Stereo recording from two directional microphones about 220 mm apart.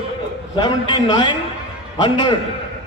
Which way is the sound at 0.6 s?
20° left (ahead or behind).